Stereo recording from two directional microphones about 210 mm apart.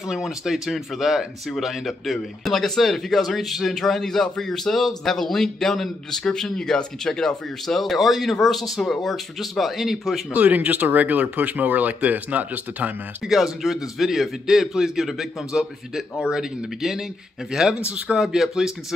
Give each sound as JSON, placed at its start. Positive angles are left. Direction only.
{"t": 0.1, "sound": "speech", "side_deg": 0}